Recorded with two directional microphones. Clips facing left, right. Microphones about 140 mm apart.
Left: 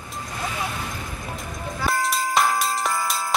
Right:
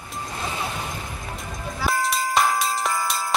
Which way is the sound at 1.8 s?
Centre (ahead or behind).